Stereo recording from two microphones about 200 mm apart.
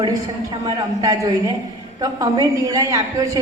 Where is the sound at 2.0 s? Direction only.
20° right (ahead or behind).